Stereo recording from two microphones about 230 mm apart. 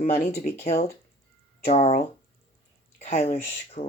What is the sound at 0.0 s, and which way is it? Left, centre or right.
Speech, left.